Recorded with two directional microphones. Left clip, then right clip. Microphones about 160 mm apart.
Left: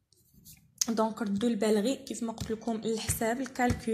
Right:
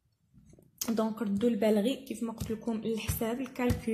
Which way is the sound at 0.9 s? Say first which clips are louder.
Left 1 dB; 25° left (ahead or behind).